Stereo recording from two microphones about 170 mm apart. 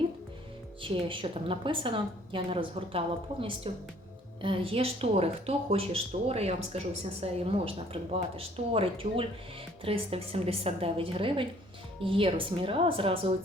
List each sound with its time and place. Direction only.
0.8 s speech: 30° right (ahead or behind)